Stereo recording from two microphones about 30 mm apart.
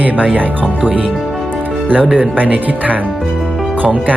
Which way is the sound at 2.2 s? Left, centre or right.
Right.